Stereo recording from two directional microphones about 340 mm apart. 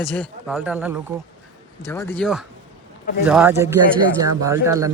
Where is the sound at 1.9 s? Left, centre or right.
Centre.